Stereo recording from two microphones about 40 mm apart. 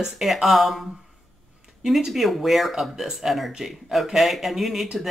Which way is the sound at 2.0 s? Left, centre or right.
Centre.